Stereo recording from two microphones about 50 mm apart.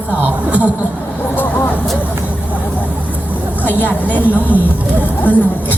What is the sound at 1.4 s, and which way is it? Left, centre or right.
Speech, left.